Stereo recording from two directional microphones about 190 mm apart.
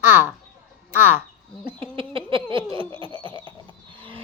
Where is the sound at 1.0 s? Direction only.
10° right (ahead or behind).